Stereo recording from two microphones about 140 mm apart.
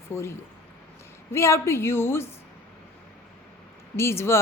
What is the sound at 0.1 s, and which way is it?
A woman's voice, 20° left (ahead or behind).